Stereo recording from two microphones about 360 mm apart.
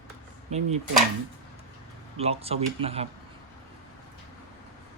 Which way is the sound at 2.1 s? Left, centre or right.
Centre.